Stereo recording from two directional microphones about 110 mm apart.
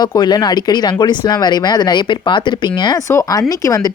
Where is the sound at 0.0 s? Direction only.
40° left (ahead or behind).